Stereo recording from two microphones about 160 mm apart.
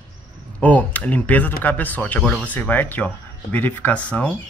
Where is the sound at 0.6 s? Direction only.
10° left (ahead or behind).